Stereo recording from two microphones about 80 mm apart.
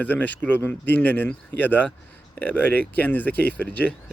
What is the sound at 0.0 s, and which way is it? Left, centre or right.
Speech, left.